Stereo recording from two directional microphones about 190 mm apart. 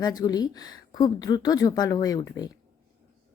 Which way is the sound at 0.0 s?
20° left (ahead or behind).